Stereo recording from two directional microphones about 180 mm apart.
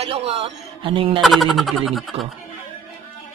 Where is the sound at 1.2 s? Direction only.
Centre (ahead or behind).